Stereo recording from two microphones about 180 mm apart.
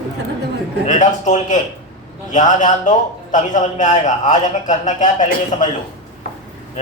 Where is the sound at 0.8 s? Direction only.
40° left (ahead or behind).